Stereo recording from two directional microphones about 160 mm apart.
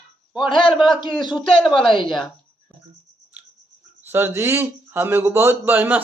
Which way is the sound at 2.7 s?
10° left (ahead or behind).